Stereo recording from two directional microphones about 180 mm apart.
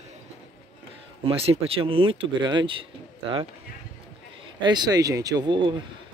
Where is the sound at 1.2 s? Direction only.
35° right (ahead or behind).